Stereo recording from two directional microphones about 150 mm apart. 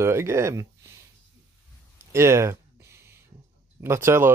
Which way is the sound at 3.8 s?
15° right (ahead or behind).